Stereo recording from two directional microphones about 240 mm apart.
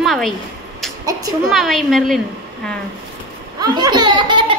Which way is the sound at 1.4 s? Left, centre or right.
Centre.